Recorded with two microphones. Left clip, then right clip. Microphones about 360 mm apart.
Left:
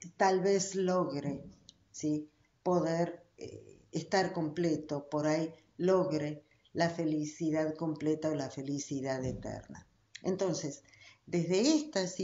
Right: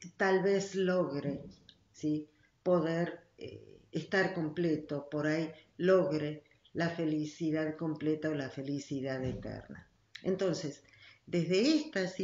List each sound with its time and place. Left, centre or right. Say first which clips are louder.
0.2 s a man's voice: left 1 dB; left